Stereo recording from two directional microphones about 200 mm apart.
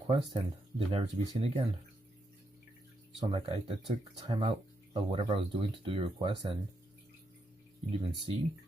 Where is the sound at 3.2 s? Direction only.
25° right (ahead or behind).